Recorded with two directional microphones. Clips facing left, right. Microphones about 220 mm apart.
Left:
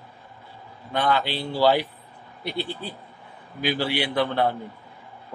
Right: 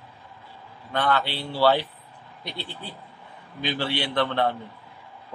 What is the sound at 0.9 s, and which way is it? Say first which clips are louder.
Speech: left 1 dB; 15° left (ahead or behind).